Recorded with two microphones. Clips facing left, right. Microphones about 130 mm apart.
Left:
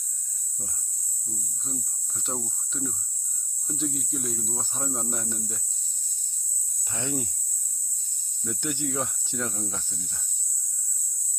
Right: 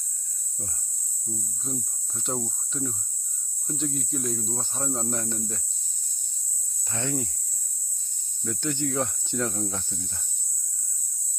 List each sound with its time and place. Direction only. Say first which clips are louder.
1.6 s speech: right 3 dB; centre (ahead or behind)
6.9 s speech: right 1 dB; 15° left (ahead or behind)
8.4 s speech: right 2 dB; 10° left (ahead or behind)